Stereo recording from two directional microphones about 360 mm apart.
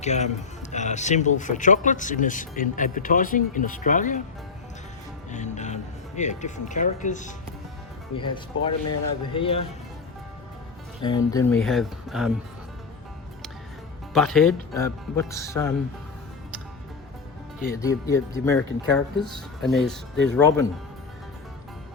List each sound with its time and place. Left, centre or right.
0.0 s a man's voice: centre
5.3 s speech: centre
11.3 s speech: centre
14.1 s speech: centre
17.7 s speech: centre